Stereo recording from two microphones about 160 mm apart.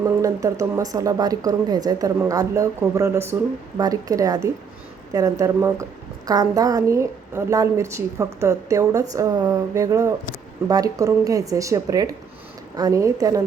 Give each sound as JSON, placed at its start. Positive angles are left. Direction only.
{"t": 0.0, "sound": "a woman's voice", "side_deg": -20}